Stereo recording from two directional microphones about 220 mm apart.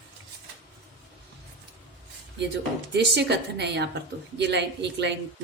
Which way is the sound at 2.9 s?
50° right (ahead or behind).